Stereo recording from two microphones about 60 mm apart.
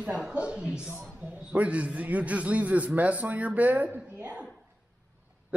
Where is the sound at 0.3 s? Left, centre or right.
Centre.